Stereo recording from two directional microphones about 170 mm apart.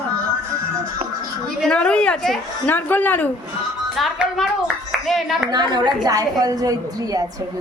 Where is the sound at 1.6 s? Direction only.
5° left (ahead or behind).